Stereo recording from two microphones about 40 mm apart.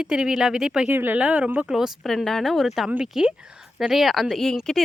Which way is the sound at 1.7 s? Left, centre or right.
Centre.